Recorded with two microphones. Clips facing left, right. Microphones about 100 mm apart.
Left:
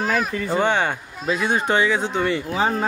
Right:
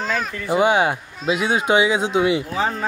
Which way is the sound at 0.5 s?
10° right (ahead or behind).